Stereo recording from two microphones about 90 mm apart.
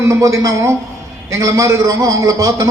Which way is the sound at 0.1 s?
35° right (ahead or behind).